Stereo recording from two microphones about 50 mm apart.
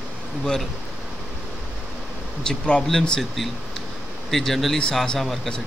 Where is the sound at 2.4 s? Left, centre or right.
Centre.